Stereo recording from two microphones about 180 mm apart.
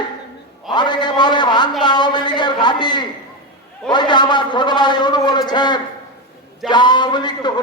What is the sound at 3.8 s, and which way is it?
A man's voice, 25° left (ahead or behind).